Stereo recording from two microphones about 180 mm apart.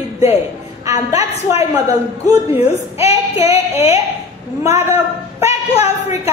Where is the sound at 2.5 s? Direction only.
35° left (ahead or behind).